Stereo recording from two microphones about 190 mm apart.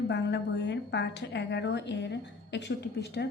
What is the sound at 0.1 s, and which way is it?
A woman's voice, 65° left (ahead or behind).